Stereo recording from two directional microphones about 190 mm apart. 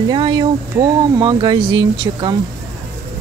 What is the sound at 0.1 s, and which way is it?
Speech, 20° right (ahead or behind).